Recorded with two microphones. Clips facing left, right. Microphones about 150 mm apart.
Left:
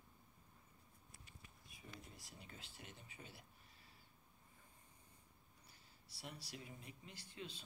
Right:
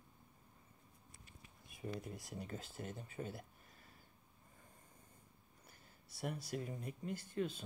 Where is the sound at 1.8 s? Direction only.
50° right (ahead or behind).